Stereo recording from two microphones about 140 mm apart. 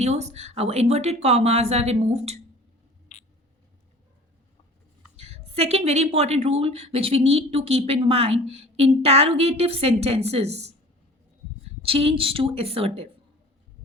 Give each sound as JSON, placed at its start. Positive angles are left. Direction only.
{"t": 0.0, "sound": "speech", "side_deg": -55}
{"t": 5.1, "sound": "a woman's voice", "side_deg": -50}
{"t": 11.8, "sound": "a woman's voice", "side_deg": -45}